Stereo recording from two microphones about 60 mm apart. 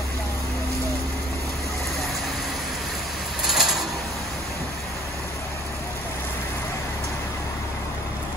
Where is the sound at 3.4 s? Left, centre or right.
Centre.